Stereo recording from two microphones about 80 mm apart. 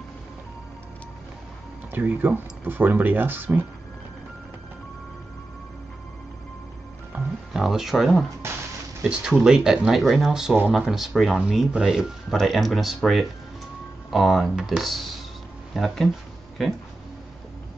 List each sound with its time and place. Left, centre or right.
1.9 s speech: right
7.1 s music: right
7.5 s speech: centre